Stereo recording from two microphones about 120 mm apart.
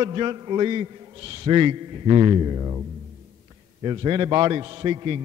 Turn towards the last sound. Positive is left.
turn(degrees=-40)  # may be behind; listen again after turning